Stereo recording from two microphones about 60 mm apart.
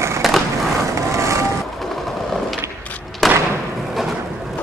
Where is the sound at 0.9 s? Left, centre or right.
Right.